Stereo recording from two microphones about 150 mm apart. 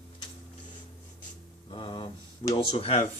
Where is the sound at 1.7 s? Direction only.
35° left (ahead or behind).